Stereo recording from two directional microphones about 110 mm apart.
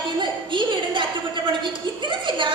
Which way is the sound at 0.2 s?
45° right (ahead or behind).